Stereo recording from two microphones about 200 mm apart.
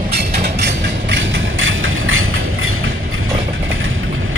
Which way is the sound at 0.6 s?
65° right (ahead or behind).